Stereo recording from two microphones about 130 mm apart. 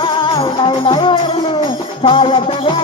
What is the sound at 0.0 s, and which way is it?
Music, 40° left (ahead or behind).